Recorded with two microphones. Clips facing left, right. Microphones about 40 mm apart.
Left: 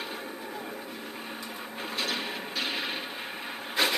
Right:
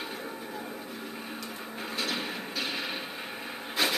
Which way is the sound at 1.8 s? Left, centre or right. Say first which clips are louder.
Left 1 dB; left.